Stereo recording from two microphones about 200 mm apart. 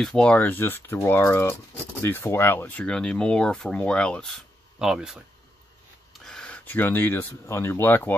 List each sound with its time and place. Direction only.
0.0 s speech: 5° left (ahead or behind)
6.2 s speech: 5° left (ahead or behind)